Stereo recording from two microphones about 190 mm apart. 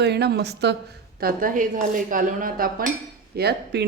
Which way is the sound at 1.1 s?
50° right (ahead or behind).